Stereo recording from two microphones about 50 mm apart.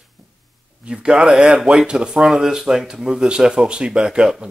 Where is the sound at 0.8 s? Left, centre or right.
Centre.